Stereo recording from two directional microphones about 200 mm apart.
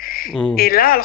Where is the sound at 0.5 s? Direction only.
45° left (ahead or behind).